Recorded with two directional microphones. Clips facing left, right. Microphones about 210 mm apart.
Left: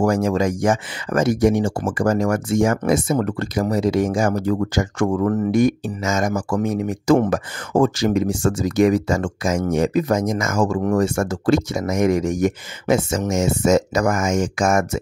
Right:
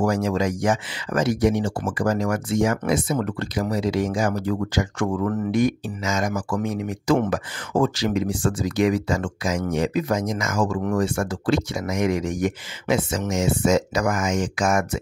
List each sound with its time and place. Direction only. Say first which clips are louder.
0.0 s speech: left 3 dB; 45° left (ahead or behind)